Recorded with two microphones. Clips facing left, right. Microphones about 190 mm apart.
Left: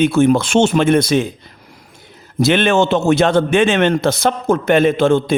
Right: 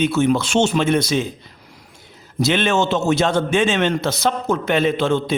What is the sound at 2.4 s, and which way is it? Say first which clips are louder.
A man's voice: left 5 dB; 55° left (ahead or behind).